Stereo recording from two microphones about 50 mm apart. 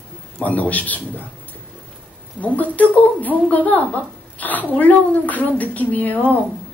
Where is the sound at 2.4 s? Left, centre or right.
Left.